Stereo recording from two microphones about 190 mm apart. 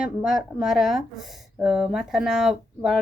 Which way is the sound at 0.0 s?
5° right (ahead or behind).